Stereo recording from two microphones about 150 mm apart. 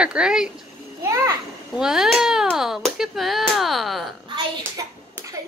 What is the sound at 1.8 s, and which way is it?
A woman's voice, 5° right (ahead or behind).